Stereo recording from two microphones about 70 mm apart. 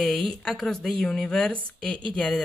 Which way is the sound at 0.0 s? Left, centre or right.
Centre.